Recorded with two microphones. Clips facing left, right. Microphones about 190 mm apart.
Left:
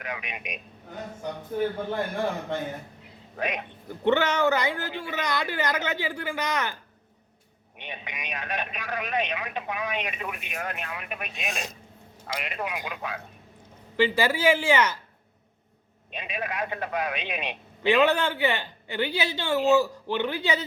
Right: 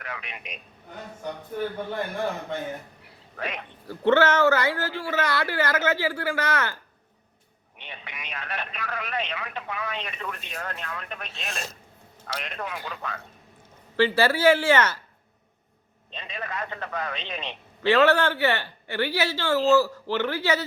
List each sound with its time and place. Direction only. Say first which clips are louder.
0.0 s speech: left 3 dB; 15° left (ahead or behind)
3.0 s speech: left 3 dB; 15° left (ahead or behind)
7.8 s speech: left 3 dB; 15° left (ahead or behind)
16.1 s speech: left 2 dB; 10° left (ahead or behind)